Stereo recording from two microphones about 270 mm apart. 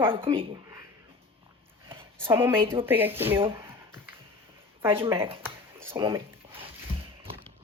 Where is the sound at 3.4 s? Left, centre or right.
Centre.